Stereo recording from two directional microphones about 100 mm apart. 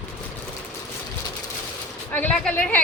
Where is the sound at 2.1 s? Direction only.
15° left (ahead or behind).